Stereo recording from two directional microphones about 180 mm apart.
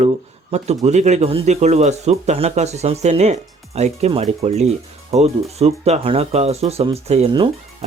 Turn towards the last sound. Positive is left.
turn(degrees=-35)  # may be behind; listen again after turning